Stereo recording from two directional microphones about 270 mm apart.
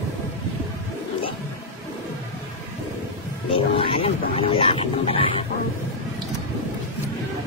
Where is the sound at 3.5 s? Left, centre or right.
Centre.